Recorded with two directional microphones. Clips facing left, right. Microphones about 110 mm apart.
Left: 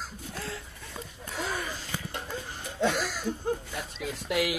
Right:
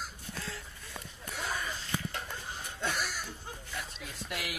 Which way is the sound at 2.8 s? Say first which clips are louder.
Left 8 dB; 90° left.